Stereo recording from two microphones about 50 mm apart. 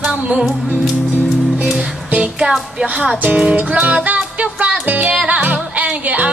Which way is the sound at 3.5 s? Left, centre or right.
Right.